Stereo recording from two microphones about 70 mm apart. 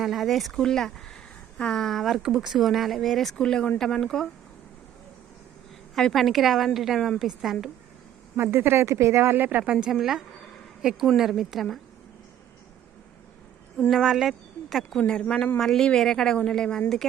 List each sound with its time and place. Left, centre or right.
0.0 s a woman's voice: centre
5.9 s speech: centre
8.4 s speech: right
9.9 s speech: centre
13.9 s speech: centre
14.9 s a woman's voice: centre